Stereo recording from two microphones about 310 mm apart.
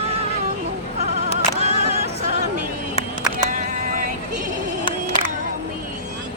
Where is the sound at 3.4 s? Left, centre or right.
Right.